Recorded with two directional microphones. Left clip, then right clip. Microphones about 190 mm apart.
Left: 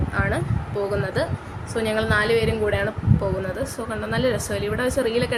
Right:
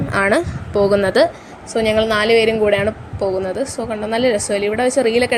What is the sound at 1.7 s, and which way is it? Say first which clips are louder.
A woman's voice: right 6 dB; 30° right (ahead or behind).